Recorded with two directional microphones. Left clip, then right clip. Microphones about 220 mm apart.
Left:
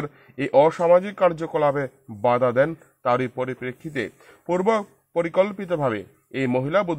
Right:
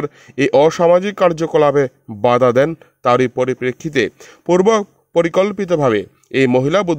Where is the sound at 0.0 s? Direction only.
40° right (ahead or behind).